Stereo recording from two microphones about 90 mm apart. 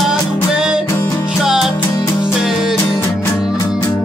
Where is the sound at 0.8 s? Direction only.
35° left (ahead or behind).